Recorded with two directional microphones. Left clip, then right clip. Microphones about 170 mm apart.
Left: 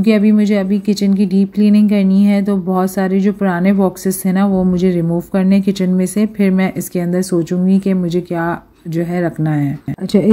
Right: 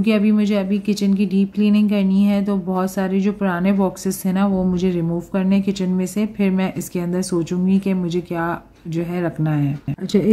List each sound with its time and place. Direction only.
0.0 s speech: 15° left (ahead or behind)